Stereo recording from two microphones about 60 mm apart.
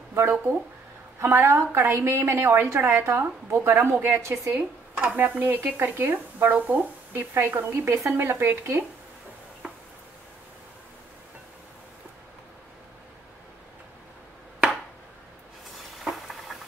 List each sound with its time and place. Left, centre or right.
0.1 s a woman's voice: right
5.1 s a woman's voice: right
16.0 s a sound: centre